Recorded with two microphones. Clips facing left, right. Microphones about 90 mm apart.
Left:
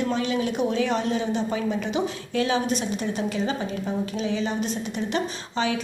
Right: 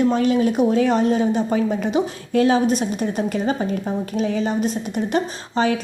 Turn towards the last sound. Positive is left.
turn(degrees=-40)  # may be behind; listen again after turning